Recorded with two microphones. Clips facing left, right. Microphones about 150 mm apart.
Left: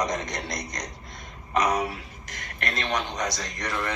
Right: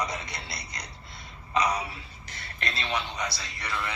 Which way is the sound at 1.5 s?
60° left (ahead or behind).